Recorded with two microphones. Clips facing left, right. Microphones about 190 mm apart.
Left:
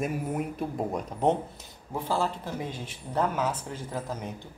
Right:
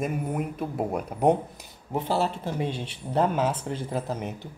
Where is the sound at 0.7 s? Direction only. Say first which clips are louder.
Right 2 dB; 10° right (ahead or behind).